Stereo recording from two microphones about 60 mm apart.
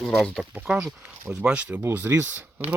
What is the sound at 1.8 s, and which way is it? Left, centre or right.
Speech, right.